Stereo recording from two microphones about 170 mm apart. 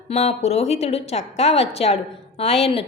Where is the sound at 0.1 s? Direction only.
40° left (ahead or behind).